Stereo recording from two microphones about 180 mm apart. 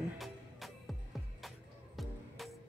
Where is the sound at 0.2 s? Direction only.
Centre (ahead or behind).